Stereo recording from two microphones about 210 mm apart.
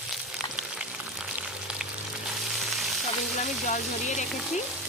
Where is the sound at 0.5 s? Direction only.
5° right (ahead or behind).